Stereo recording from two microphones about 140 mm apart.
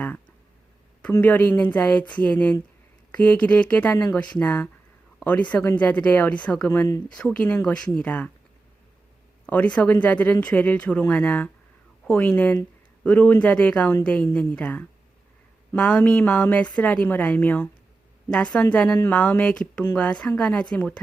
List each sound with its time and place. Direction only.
1.1 s a woman's voice: 10° left (ahead or behind)
7.2 s a woman's voice: 10° left (ahead or behind)
9.5 s a woman's voice: 10° left (ahead or behind)